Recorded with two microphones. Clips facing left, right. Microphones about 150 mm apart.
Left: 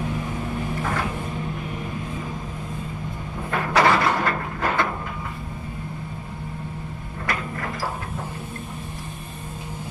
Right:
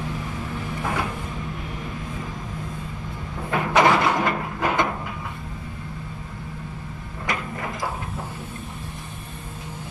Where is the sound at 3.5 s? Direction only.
15° right (ahead or behind).